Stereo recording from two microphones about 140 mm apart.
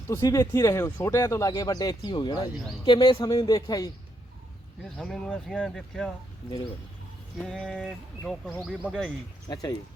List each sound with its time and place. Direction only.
0.1 s speech: 25° left (ahead or behind)
4.9 s speech: 5° left (ahead or behind)
7.3 s speech: centre (ahead or behind)
9.5 s speech: 25° left (ahead or behind)